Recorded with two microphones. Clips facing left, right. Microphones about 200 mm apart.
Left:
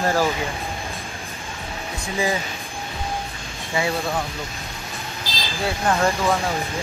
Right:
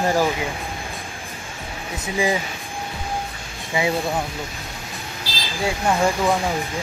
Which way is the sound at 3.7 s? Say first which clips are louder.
Right 2 dB; 15° right (ahead or behind).